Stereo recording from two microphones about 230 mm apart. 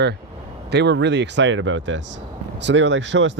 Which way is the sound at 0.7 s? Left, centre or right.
Right.